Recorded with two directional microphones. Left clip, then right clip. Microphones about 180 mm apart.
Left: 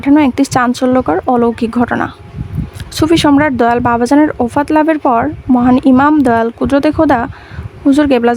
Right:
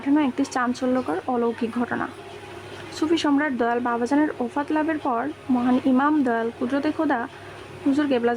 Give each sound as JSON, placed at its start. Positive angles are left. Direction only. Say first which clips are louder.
{"t": 0.0, "sound": "speech", "louder": "left 12 dB", "side_deg": 55}